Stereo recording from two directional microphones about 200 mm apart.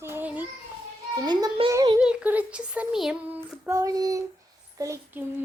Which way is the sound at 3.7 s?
15° right (ahead or behind).